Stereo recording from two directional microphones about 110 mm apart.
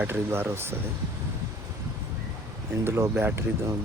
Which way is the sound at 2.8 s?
20° right (ahead or behind).